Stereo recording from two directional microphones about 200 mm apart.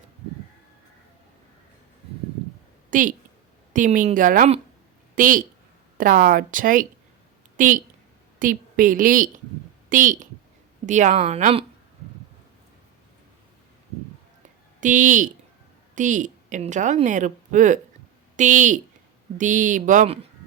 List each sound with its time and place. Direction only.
2.9 s a woman's voice: 40° right (ahead or behind)
14.8 s a woman's voice: 40° right (ahead or behind)